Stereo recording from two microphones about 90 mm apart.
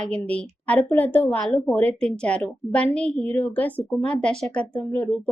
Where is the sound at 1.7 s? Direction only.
15° left (ahead or behind).